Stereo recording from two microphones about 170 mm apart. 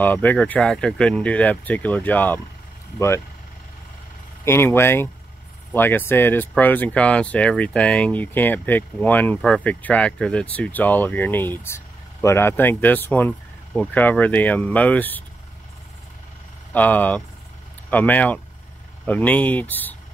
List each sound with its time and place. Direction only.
0.0 s speech: 10° left (ahead or behind)
4.5 s speech: 15° left (ahead or behind)
16.7 s speech: 10° left (ahead or behind)